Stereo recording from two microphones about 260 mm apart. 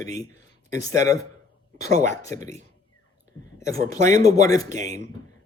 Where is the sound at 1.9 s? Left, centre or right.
Right.